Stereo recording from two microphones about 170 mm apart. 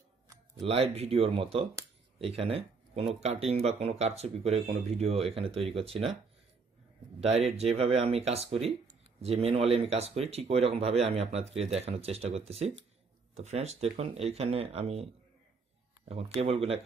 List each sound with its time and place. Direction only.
0.6 s speech: 40° right (ahead or behind)
7.2 s speech: 35° right (ahead or behind)
16.1 s speech: 35° right (ahead or behind)